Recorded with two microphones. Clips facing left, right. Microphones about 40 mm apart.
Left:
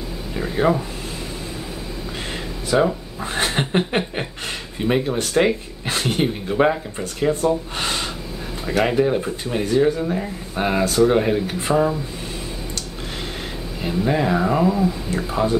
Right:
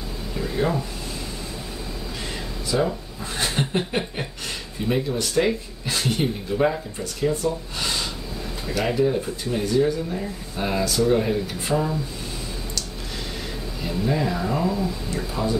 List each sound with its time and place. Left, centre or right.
0.4 s speech: left
2.7 s speech: left
13.7 s speech: left